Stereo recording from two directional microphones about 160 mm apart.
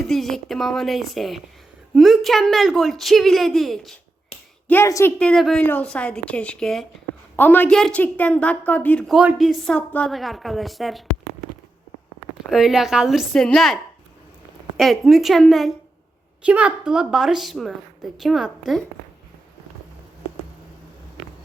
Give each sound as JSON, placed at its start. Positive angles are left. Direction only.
{"t": 0.0, "sound": "a woman's voice", "side_deg": 0}
{"t": 4.7, "sound": "a woman's voice", "side_deg": 20}
{"t": 5.2, "sound": "a woman's voice", "side_deg": 5}
{"t": 12.5, "sound": "a woman's voice", "side_deg": 0}
{"t": 14.8, "sound": "a woman's voice", "side_deg": 0}